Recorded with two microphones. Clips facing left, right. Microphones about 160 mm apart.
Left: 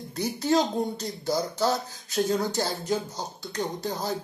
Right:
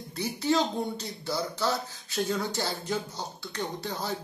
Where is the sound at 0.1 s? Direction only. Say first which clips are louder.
Left 3 dB; 40° left (ahead or behind).